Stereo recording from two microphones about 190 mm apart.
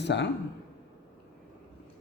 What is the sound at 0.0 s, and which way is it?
Speech, 65° left (ahead or behind).